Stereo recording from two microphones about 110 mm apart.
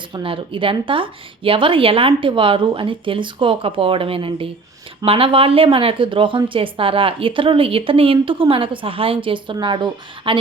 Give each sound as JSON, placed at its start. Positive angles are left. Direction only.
{"t": 0.1, "sound": "speech", "side_deg": -50}